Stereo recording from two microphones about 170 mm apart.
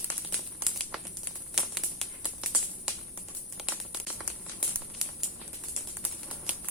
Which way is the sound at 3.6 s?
Centre (ahead or behind).